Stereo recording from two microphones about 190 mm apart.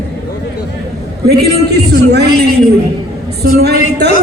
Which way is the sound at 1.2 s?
60° right (ahead or behind).